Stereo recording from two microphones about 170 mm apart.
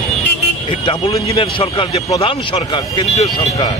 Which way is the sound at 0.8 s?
30° left (ahead or behind).